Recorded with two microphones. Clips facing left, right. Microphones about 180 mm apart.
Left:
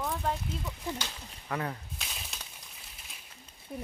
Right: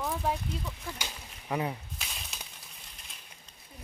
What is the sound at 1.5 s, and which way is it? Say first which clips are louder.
Speech: right 3 dB; 15° right (ahead or behind).